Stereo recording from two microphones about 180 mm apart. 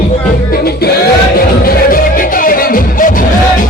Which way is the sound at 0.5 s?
60° left (ahead or behind).